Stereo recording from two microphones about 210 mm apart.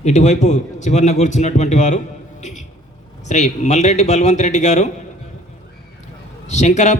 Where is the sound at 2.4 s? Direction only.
35° left (ahead or behind).